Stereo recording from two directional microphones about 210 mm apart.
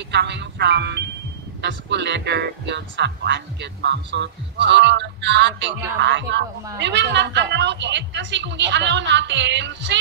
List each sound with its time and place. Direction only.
0.1 s speech: 55° right (ahead or behind)